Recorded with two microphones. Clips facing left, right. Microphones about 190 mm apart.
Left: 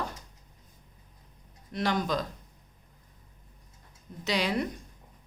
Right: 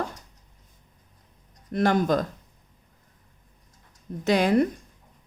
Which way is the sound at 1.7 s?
50° right (ahead or behind).